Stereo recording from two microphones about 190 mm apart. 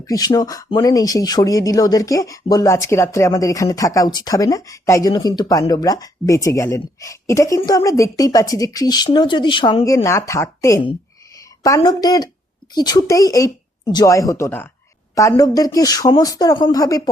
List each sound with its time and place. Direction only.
0.0 s a woman's voice: 20° left (ahead or behind)